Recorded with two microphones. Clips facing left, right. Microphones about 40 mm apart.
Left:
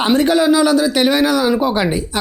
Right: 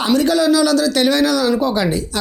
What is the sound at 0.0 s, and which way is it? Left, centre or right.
Speech, left.